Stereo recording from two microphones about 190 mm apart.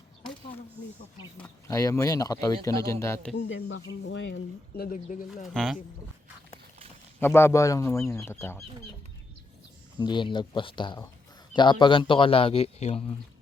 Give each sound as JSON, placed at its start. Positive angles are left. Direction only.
{"t": 1.4, "sound": "speech", "side_deg": 15}
{"t": 3.3, "sound": "speech", "side_deg": 75}
{"t": 4.8, "sound": "speech", "side_deg": 45}
{"t": 5.5, "sound": "speech", "side_deg": 0}
{"t": 7.2, "sound": "speech", "side_deg": 10}
{"t": 10.0, "sound": "a man's voice", "side_deg": 25}